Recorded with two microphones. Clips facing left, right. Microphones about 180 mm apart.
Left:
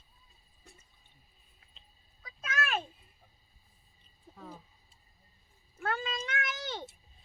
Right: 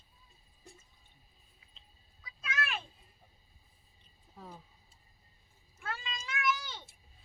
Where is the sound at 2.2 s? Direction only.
45° left (ahead or behind).